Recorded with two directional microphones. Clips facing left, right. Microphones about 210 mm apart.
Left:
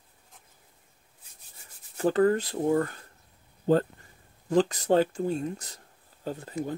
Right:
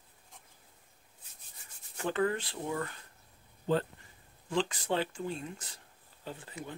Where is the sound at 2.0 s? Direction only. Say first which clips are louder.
Left 8 dB; 35° left (ahead or behind).